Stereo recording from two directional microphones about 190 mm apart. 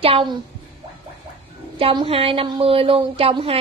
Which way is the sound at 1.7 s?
30° right (ahead or behind).